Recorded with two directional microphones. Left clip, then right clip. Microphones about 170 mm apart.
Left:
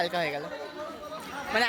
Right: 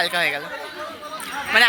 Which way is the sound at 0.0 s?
15° left (ahead or behind).